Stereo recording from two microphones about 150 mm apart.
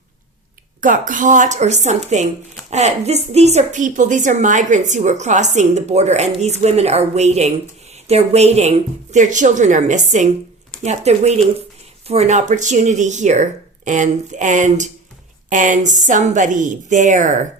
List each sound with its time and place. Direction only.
0.8 s a woman's voice: 60° right (ahead or behind)